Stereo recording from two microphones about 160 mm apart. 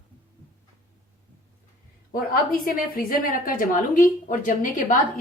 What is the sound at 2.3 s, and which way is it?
A woman's voice, 65° left (ahead or behind).